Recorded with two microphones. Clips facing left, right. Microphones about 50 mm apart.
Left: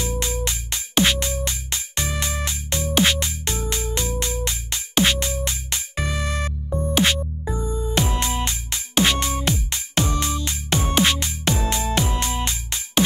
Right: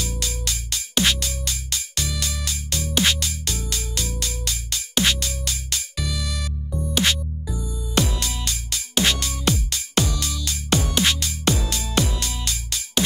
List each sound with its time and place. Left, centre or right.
0.0 s music: left